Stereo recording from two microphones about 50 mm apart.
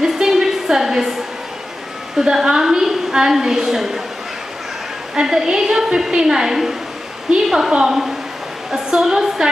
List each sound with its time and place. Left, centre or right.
0.0 s a sound: centre
2.1 s a woman's voice: centre
5.1 s a woman's voice: centre
7.7 s a woman's voice: centre